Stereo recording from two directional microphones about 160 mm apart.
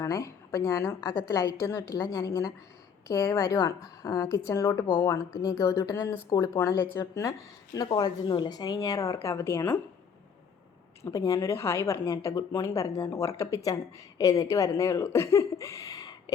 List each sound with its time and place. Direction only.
0.0 s a woman's voice: 20° left (ahead or behind)
11.0 s a woman's voice: 20° left (ahead or behind)